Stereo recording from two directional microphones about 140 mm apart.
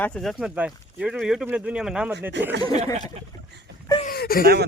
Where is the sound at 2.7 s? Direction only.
50° right (ahead or behind).